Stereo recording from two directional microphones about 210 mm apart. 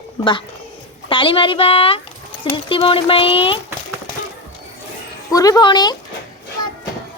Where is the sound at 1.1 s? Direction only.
25° left (ahead or behind).